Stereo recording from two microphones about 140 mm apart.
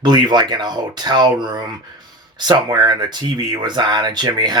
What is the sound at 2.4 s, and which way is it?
Speech, 30° right (ahead or behind).